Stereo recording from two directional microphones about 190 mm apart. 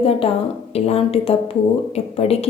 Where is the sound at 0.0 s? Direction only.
30° left (ahead or behind).